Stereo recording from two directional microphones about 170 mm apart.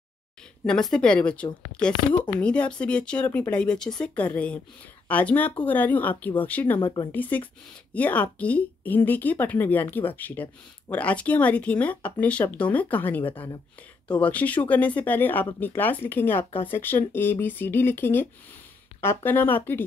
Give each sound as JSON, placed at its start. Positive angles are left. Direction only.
{"t": 0.7, "sound": "a woman's voice", "side_deg": 5}
{"t": 6.8, "sound": "speech", "side_deg": 25}
{"t": 7.1, "sound": "a woman's voice", "side_deg": 10}
{"t": 14.2, "sound": "a woman's voice", "side_deg": 10}